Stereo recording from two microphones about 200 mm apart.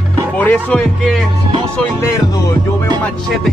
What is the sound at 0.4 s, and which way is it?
Speech, 10° left (ahead or behind).